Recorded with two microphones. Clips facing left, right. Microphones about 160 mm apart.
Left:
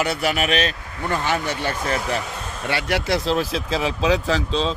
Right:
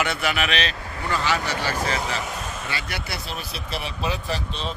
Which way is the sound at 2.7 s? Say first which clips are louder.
Left 10 dB; 75° left (ahead or behind).